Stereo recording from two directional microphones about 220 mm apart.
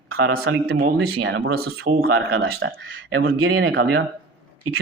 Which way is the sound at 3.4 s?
50° right (ahead or behind).